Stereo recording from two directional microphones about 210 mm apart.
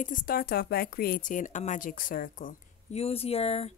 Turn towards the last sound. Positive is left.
turn(degrees=30)  # may be behind; listen again after turning